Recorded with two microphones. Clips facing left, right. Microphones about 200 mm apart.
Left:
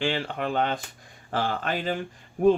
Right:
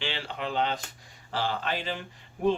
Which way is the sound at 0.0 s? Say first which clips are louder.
Left 6 dB; 50° left (ahead or behind).